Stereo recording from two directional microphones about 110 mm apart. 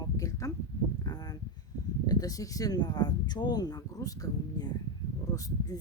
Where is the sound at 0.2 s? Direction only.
30° left (ahead or behind).